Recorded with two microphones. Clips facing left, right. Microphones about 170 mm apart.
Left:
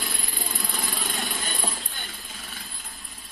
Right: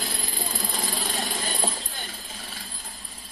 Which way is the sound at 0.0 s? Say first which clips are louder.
Right 2 dB; 30° right (ahead or behind).